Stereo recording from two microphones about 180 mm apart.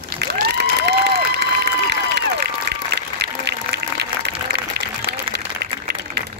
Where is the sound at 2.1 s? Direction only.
65° right (ahead or behind).